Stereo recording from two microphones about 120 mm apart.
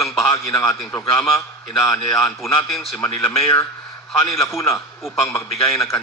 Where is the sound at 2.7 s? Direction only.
Centre (ahead or behind).